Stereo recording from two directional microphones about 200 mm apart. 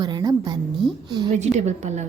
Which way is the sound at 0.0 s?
20° right (ahead or behind).